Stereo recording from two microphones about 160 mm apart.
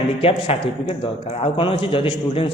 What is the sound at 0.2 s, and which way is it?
A man's voice, 35° left (ahead or behind).